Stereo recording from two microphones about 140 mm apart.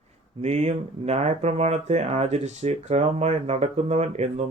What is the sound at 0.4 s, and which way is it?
Speech, 55° right (ahead or behind).